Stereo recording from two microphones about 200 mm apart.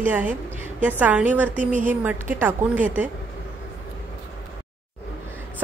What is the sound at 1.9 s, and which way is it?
A woman's voice, 10° right (ahead or behind).